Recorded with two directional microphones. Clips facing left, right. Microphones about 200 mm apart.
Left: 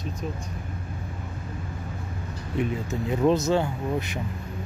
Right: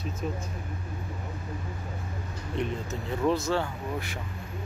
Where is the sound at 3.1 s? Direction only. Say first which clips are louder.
Left 5 dB; 20° left (ahead or behind).